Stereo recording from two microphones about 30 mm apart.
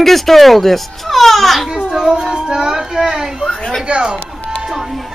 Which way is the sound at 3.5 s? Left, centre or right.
Left.